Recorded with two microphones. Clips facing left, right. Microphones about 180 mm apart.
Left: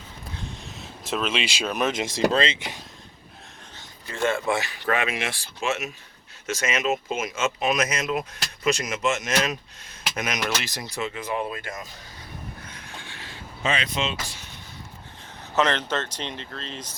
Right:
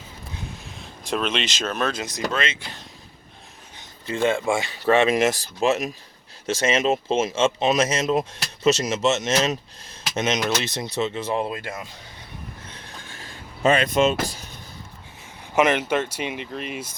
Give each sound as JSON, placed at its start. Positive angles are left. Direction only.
{"t": 0.8, "sound": "speech", "side_deg": 0}
{"t": 2.6, "sound": "speech", "side_deg": 15}
{"t": 4.0, "sound": "speech", "side_deg": -25}
{"t": 12.6, "sound": "train", "side_deg": -30}
{"t": 13.1, "sound": "vehicle", "side_deg": -45}
{"t": 15.5, "sound": "speech", "side_deg": -10}